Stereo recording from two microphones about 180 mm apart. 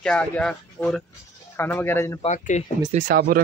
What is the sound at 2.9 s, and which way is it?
Speech, 50° right (ahead or behind).